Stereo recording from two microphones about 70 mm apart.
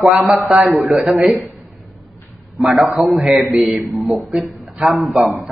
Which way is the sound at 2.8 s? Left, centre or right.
Centre.